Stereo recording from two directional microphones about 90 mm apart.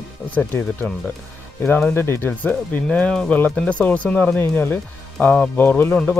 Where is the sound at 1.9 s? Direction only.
25° left (ahead or behind).